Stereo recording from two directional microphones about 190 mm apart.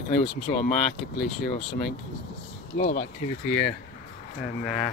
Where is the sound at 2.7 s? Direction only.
50° left (ahead or behind).